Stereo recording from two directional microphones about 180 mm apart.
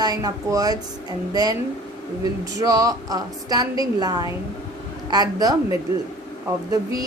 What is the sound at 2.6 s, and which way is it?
A woman's voice, 20° right (ahead or behind).